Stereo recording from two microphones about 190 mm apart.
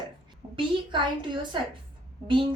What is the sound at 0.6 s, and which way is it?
A woman's voice, 25° right (ahead or behind).